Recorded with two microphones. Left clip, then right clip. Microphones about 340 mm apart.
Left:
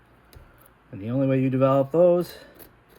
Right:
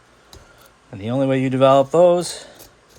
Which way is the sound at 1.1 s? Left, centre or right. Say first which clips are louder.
Right 5 dB; right.